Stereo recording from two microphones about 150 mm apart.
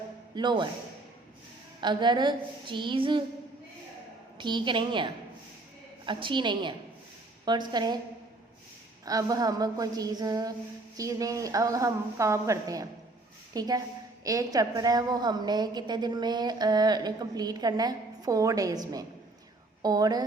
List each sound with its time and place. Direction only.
0.3 s a woman's voice: 30° right (ahead or behind)
1.8 s a woman's voice: 30° right (ahead or behind)
4.4 s a woman's voice: 30° right (ahead or behind)
9.0 s a woman's voice: 25° right (ahead or behind)